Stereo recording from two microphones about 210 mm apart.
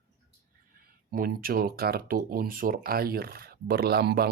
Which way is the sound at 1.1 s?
45° right (ahead or behind).